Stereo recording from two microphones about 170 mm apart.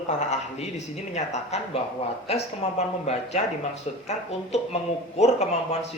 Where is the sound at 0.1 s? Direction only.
45° left (ahead or behind).